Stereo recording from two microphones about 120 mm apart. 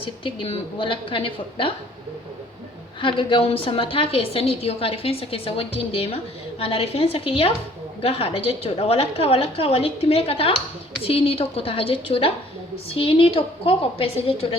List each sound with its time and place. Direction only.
0.0 s a woman's voice: 45° left (ahead or behind)
3.0 s a woman's voice: 45° left (ahead or behind)